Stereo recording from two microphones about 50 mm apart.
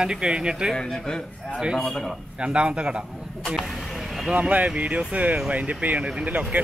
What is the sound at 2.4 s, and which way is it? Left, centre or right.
Speech, centre.